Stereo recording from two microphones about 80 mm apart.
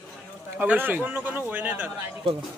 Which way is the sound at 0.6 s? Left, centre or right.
Right.